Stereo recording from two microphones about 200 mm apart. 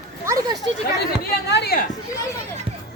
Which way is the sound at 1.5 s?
55° left (ahead or behind).